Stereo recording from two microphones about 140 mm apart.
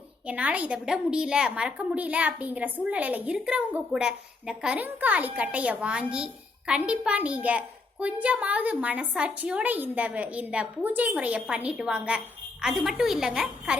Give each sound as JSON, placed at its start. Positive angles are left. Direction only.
{"t": 0.3, "sound": "a woman's voice", "side_deg": -10}